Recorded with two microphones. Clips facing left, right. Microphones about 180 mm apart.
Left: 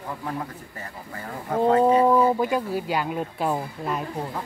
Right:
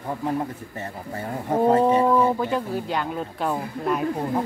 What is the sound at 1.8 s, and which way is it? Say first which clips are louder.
Speech: left 1 dB; 10° left (ahead or behind).